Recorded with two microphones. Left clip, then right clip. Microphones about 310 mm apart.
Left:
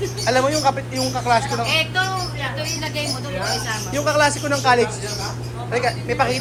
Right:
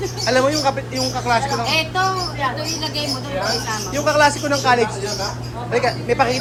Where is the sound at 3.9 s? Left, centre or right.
Centre.